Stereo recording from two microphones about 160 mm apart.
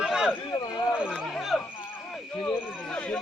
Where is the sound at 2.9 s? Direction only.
5° left (ahead or behind).